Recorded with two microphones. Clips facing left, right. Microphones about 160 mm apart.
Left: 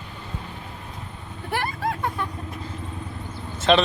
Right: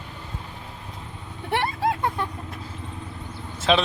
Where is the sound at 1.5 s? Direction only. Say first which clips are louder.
Right 3 dB; 25° right (ahead or behind).